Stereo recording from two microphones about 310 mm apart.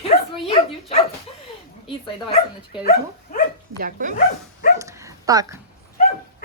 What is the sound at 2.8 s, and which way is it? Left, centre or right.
Speech, left.